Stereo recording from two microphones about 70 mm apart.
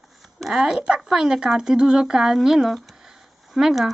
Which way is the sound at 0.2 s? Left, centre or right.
Centre.